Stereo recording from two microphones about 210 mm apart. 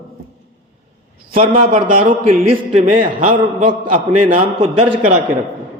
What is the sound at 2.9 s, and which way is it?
A man's voice, 40° right (ahead or behind).